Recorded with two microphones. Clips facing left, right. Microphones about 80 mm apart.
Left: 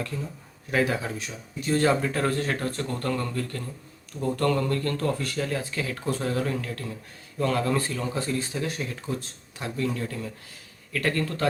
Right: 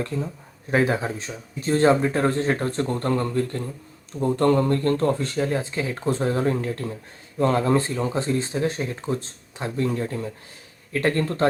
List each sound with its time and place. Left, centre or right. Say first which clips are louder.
0.7 s a man's voice: right 4 dB; right